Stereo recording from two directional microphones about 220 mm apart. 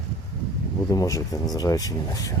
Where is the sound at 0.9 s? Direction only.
15° left (ahead or behind).